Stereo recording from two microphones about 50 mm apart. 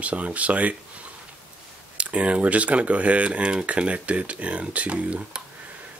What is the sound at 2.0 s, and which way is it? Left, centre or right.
Speech, right.